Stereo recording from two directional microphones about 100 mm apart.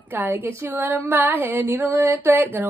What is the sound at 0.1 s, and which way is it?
Speech, 20° right (ahead or behind).